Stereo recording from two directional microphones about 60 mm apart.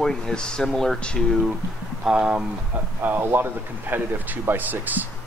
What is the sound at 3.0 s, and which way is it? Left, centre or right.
Speech, right.